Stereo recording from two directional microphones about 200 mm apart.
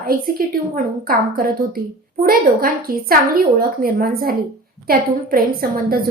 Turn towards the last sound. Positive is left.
turn(degrees=-45)  # may be behind; listen again after turning